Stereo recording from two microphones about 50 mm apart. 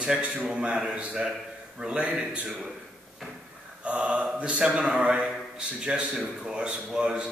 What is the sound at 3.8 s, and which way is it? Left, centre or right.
A man's voice, right.